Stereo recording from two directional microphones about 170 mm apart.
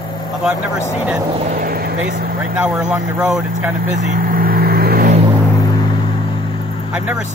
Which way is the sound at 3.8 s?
45° right (ahead or behind).